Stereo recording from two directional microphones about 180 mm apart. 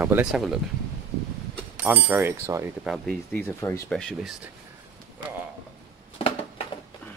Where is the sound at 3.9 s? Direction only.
5° left (ahead or behind).